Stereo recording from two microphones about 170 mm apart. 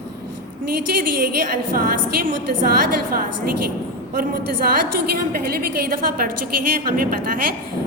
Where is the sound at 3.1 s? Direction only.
55° right (ahead or behind).